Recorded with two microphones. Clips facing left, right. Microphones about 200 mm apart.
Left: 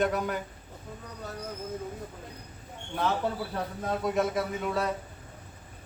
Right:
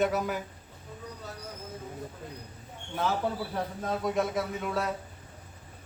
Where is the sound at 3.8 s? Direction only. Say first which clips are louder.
Left 2 dB; centre (ahead or behind).